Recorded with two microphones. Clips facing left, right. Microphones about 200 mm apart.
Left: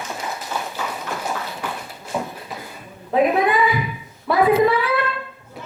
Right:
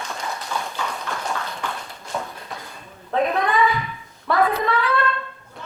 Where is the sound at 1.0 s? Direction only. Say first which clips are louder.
Left 1 dB; 5° left (ahead or behind).